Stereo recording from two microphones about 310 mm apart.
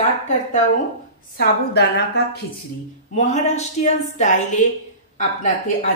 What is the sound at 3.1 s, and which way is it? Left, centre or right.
A woman's voice, left.